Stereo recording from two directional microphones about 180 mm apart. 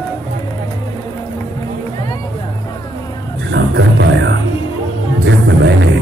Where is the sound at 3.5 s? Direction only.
80° right.